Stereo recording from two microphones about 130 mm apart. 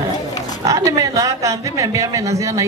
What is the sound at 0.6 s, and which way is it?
Speech, 25° right (ahead or behind).